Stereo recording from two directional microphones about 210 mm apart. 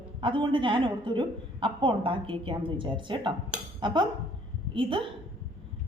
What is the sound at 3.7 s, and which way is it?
Cutlery, 20° right (ahead or behind).